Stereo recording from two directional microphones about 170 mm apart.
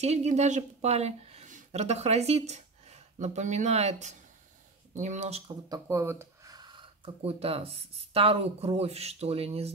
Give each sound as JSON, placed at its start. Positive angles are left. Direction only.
{"t": 0.0, "sound": "speech", "side_deg": -40}
{"t": 5.7, "sound": "speech", "side_deg": -15}